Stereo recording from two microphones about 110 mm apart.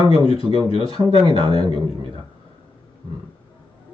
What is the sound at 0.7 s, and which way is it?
Speech, 60° left (ahead or behind).